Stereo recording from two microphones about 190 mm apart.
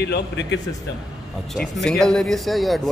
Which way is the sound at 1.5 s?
Centre (ahead or behind).